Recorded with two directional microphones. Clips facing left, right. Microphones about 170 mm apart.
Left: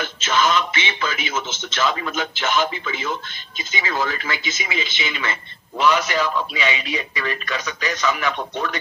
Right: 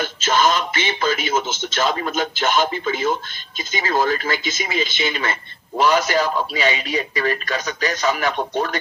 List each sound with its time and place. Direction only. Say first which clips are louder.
0.0 s speech: right 2 dB; 40° right (ahead or behind)